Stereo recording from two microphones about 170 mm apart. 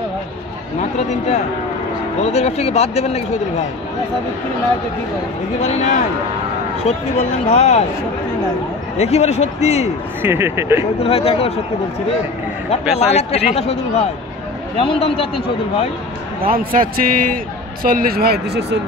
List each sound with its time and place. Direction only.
0.9 s speech: 40° left (ahead or behind)
5.6 s a man's voice: 45° left (ahead or behind)
8.9 s speech: 40° left (ahead or behind)
10.2 s speech: 15° right (ahead or behind)
11.0 s speech: 35° left (ahead or behind)
12.9 s speech: 40° left (ahead or behind)
16.3 s a man's voice: 60° right (ahead or behind); by 18.8 s 75° right (ahead or behind)